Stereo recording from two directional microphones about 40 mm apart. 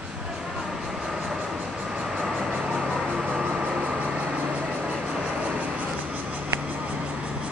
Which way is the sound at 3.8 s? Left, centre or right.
Right.